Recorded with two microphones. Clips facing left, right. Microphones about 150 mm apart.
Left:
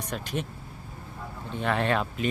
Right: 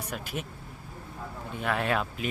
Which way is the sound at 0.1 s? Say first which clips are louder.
Left 5 dB; 10° right (ahead or behind).